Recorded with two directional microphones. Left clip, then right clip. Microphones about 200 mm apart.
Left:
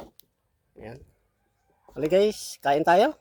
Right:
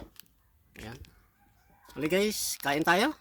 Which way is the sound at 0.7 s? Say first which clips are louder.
Left 3 dB; 5° right (ahead or behind).